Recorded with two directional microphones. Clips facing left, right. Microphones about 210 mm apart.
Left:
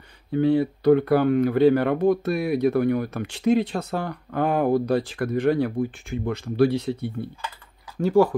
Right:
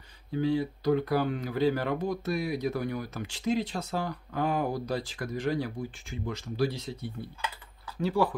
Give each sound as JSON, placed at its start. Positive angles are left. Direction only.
{"t": 0.3, "sound": "speech", "side_deg": 60}
{"t": 8.0, "sound": "speech", "side_deg": 45}